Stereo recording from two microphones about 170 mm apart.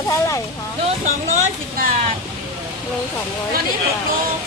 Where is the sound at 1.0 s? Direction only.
50° right (ahead or behind).